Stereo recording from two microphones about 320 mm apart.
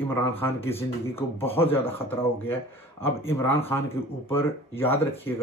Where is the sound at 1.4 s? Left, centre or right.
Centre.